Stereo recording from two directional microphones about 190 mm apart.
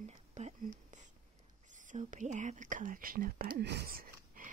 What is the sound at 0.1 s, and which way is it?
Whispering, 35° right (ahead or behind).